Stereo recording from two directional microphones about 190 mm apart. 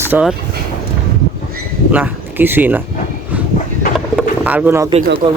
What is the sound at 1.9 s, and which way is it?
Speech, 10° right (ahead or behind).